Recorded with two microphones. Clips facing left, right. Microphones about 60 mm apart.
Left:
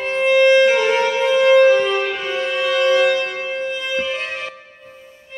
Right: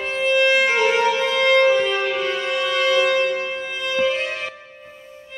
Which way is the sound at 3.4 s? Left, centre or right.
Centre.